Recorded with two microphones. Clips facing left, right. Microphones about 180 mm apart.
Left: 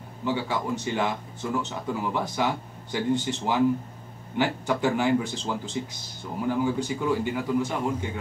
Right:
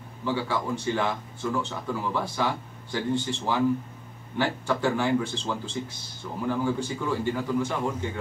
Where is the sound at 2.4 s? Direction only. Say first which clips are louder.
Left 2 dB; 15° left (ahead or behind).